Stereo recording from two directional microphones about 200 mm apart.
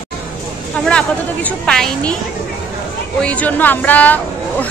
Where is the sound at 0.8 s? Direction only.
5° left (ahead or behind).